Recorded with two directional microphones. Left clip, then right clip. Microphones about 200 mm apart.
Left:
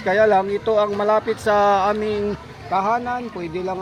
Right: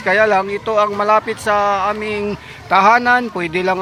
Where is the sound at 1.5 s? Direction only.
20° left (ahead or behind).